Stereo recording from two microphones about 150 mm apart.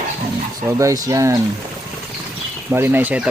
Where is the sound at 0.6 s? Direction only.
20° right (ahead or behind).